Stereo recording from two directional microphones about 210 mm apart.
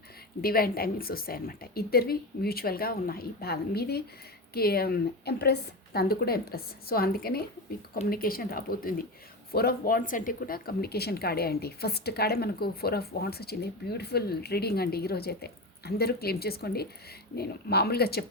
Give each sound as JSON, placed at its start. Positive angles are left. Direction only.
{"t": 0.4, "sound": "speech", "side_deg": 45}